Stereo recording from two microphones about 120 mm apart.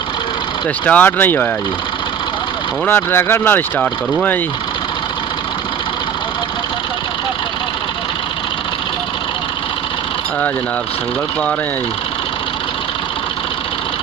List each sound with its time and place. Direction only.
0.8 s speech: 15° left (ahead or behind)
2.9 s speech: 20° left (ahead or behind)